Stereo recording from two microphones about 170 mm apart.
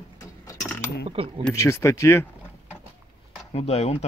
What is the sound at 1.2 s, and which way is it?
Speech, 35° right (ahead or behind).